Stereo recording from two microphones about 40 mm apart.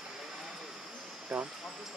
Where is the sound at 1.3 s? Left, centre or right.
Right.